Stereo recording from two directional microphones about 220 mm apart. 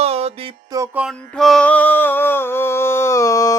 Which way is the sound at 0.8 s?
5° right (ahead or behind).